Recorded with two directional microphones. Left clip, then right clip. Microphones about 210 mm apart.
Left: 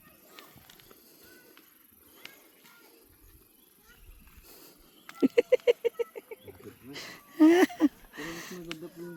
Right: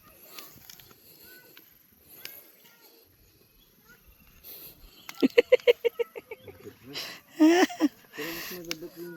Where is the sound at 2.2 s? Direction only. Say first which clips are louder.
Right 3 dB; 55° right (ahead or behind).